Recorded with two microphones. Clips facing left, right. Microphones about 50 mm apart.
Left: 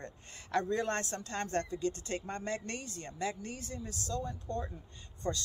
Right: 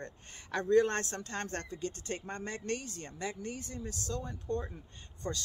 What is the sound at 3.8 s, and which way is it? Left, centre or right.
Speech, right.